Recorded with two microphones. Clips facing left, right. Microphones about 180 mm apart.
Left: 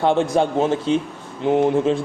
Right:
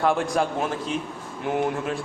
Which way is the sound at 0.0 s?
25° left (ahead or behind).